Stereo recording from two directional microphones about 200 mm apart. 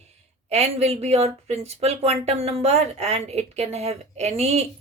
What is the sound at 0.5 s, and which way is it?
Speech, 30° right (ahead or behind).